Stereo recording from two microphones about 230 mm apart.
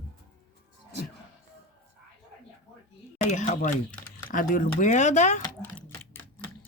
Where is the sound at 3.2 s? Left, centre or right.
Left.